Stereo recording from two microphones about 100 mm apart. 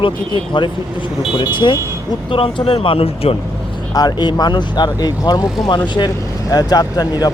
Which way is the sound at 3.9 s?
45° left (ahead or behind).